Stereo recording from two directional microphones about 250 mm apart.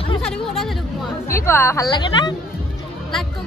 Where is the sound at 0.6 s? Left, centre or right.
Centre.